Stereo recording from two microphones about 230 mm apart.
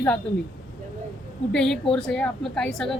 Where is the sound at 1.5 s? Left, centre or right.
Centre.